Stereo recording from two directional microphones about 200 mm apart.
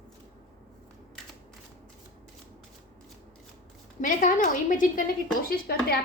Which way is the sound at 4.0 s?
40° left (ahead or behind).